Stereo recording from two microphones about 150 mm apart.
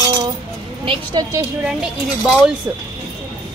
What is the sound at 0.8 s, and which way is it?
Speech, 30° right (ahead or behind).